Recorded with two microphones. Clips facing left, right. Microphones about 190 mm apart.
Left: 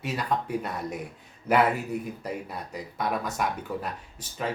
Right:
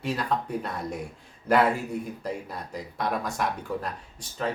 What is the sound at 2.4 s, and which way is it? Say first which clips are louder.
Speech: even; 5° left (ahead or behind).